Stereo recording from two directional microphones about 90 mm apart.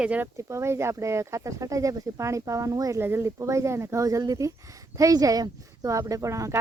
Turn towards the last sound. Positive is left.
turn(degrees=-35)  # may be behind; listen again after turning